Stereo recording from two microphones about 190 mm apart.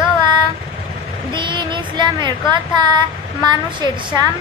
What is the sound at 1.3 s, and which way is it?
Speech, 25° right (ahead or behind).